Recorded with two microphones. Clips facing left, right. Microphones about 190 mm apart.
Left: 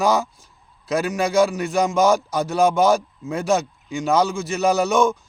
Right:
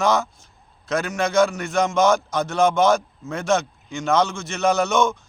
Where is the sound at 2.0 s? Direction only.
35° left (ahead or behind).